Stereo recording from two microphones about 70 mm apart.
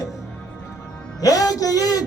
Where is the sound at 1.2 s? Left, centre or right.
Left.